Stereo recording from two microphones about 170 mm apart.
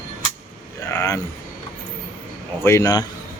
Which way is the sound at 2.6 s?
20° left (ahead or behind).